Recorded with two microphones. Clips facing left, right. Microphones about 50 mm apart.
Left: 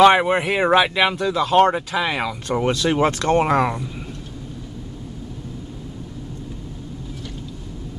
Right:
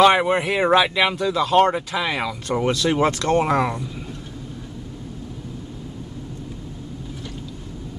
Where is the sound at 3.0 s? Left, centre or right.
Left.